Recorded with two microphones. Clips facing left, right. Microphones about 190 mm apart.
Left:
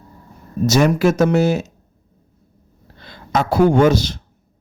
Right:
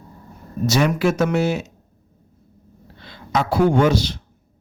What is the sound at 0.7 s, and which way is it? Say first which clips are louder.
Speech: left 4 dB; 45° left (ahead or behind).